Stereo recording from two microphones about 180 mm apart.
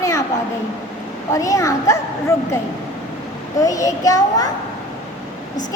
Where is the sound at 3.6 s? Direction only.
20° left (ahead or behind).